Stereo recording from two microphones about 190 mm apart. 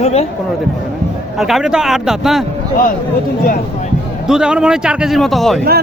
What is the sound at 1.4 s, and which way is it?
A man's voice, centre (ahead or behind).